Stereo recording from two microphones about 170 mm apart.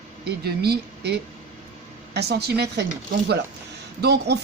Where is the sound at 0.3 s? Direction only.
75° right (ahead or behind).